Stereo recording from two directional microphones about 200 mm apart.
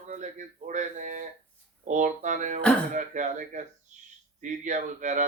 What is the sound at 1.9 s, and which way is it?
Speech, 40° right (ahead or behind).